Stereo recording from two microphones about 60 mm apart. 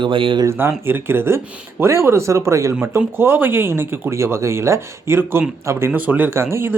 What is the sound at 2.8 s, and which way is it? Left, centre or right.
Speech, right.